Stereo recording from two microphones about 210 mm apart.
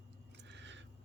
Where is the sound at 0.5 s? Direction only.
60° right (ahead or behind).